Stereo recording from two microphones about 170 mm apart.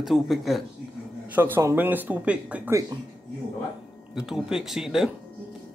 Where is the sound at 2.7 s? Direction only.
20° right (ahead or behind).